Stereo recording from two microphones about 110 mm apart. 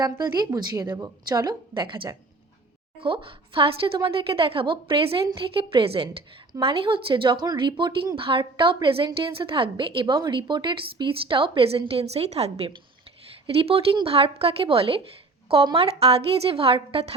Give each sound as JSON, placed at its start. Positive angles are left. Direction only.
{"t": 0.0, "sound": "a woman's voice", "side_deg": -35}
{"t": 8.1, "sound": "a woman's voice", "side_deg": -50}
{"t": 11.9, "sound": "a woman's voice", "side_deg": -70}